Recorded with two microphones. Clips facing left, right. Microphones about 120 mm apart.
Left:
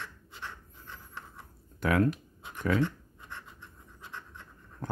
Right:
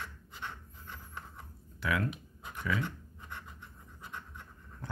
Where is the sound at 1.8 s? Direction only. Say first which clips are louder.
Left 7 dB; 45° left (ahead or behind).